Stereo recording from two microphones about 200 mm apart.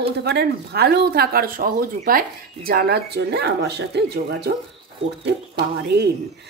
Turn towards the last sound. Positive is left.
turn(degrees=-55)  # may be behind; listen again after turning